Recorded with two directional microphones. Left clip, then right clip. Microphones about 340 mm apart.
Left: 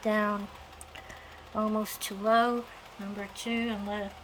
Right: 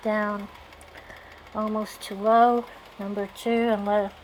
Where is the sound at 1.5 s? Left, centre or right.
Centre.